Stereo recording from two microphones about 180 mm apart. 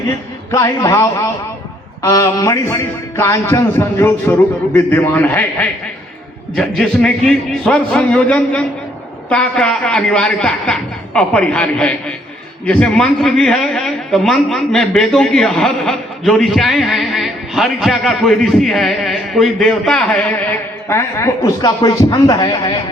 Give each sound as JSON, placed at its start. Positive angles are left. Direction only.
{"t": 0.5, "sound": "a man's voice", "side_deg": 15}